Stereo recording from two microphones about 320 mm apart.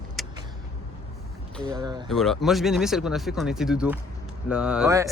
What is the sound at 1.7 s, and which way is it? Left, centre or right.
Speech, centre.